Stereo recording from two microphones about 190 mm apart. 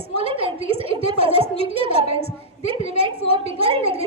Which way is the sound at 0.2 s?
30° right (ahead or behind).